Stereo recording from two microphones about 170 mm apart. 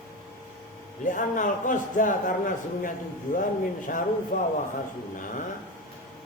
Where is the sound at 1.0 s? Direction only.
50° left (ahead or behind).